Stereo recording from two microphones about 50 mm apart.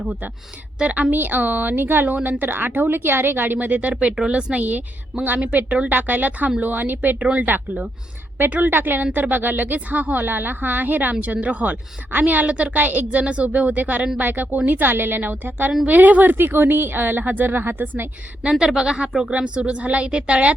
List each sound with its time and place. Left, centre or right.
0.8 s a woman's voice: right
1.1 s a woman's voice: right
4.6 s speech: right
5.4 s speech: right
12.5 s a woman's voice: right
12.7 s a woman's voice: right
18.6 s a woman's voice: centre